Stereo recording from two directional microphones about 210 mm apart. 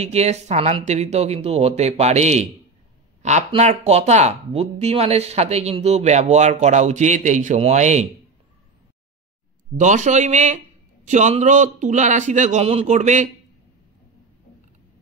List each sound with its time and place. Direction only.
0.0 s speech: 30° right (ahead or behind)
9.8 s speech: 35° right (ahead or behind)